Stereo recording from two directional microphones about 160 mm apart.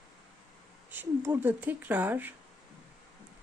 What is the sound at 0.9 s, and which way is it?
Speech, 15° right (ahead or behind).